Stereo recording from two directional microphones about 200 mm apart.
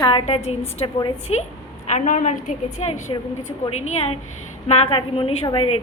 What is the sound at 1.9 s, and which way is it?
A woman's voice, 40° left (ahead or behind).